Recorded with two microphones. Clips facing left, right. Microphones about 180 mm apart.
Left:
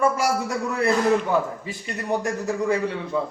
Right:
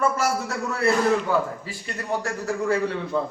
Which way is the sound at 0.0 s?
15° left (ahead or behind).